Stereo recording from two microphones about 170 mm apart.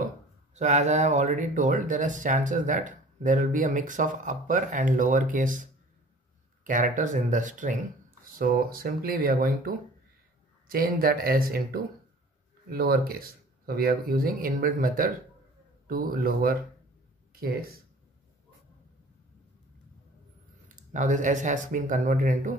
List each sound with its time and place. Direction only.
0.6 s speech: 45° right (ahead or behind); by 16.5 s 60° right (ahead or behind)
20.6 s speech: 50° right (ahead or behind)